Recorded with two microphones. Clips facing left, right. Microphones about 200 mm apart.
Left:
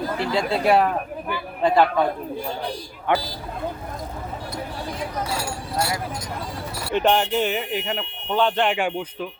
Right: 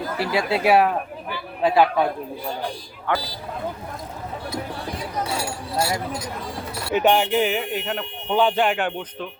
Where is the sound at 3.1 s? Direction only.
20° left (ahead or behind).